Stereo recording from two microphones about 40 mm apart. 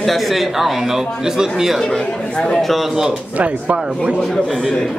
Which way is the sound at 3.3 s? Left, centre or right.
Right.